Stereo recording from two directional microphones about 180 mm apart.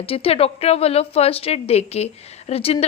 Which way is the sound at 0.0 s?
30° left (ahead or behind).